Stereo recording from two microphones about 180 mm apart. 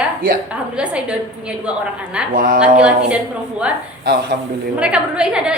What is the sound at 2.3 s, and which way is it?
Speech, 50° right (ahead or behind).